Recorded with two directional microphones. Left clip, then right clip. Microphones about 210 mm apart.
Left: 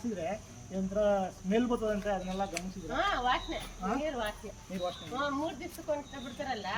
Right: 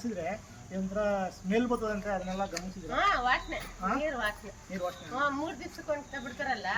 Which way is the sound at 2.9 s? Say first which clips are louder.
Right 3 dB; 20° right (ahead or behind).